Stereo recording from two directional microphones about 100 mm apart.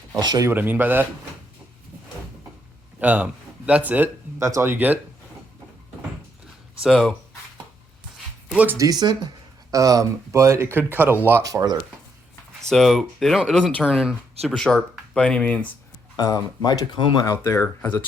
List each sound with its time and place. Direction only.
0.2 s speech: 45° right (ahead or behind)
0.4 s speech: 20° right (ahead or behind)
3.0 s speech: 15° right (ahead or behind)
4.4 s speech: 30° right (ahead or behind)
6.8 s speech: 5° right (ahead or behind)
8.5 s speech: 20° right (ahead or behind)
8.8 s speech: 40° right (ahead or behind); by 11.1 s 20° right (ahead or behind)
11.4 s speech: 40° right (ahead or behind)
12.7 s speech: centre (ahead or behind)
13.9 s speech: 5° right (ahead or behind)
14.4 s speech: 5° left (ahead or behind)
16.1 s speech: 40° left (ahead or behind)
17.4 s speech: 25° left (ahead or behind)